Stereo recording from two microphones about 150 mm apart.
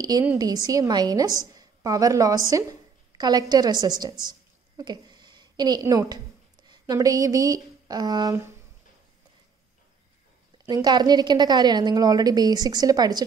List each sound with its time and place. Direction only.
0.4 s a woman's voice: 25° right (ahead or behind)
4.2 s a sound: 30° right (ahead or behind)
6.7 s speech: 25° right (ahead or behind)
10.7 s a woman's voice: 30° right (ahead or behind)